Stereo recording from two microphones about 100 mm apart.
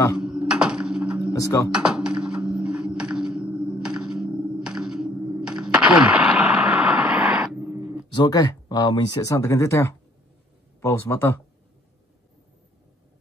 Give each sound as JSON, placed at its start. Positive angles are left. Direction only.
{"t": 0.2, "sound": "a sound", "side_deg": -10}
{"t": 1.3, "sound": "speech", "side_deg": 30}
{"t": 1.7, "sound": "a sound", "side_deg": -5}
{"t": 7.5, "sound": "dog", "side_deg": -20}
{"t": 8.1, "sound": "speech", "side_deg": 45}
{"t": 9.2, "sound": "speech", "side_deg": 30}